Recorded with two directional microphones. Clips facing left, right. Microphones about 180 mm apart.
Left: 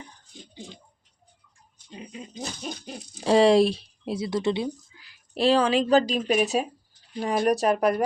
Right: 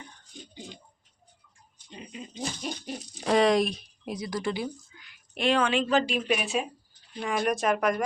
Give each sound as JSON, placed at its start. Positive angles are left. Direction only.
{"t": 3.2, "sound": "speech", "side_deg": 30}